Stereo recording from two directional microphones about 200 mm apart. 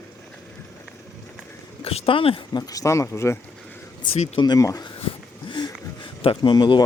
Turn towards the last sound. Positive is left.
turn(degrees=25)  # may be behind; listen again after turning